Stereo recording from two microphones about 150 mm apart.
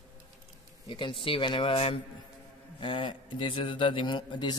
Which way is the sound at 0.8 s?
30° left (ahead or behind).